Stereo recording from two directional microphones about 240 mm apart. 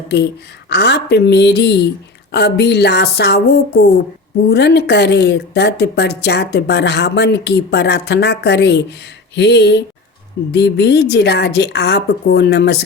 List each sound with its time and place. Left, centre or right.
0.7 s a woman's voice: left